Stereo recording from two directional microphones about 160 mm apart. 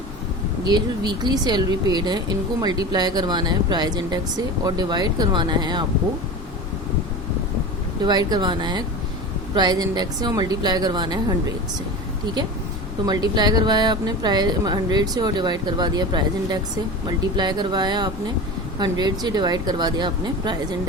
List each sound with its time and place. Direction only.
0.6 s speech: 25° right (ahead or behind)
8.0 s speech: 25° right (ahead or behind)
13.1 s speech: 25° right (ahead or behind)